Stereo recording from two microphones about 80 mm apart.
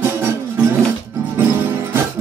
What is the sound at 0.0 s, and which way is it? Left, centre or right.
Music, right.